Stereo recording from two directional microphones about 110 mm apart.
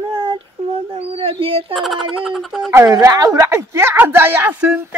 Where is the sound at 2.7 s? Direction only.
35° right (ahead or behind).